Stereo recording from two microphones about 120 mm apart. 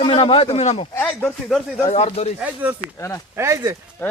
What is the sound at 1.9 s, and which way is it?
Speech, 60° left (ahead or behind).